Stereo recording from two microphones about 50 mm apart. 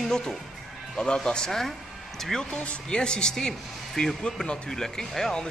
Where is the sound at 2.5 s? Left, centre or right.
Left.